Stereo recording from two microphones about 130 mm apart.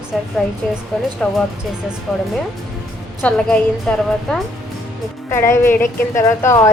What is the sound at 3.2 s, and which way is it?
A woman's voice, 10° left (ahead or behind).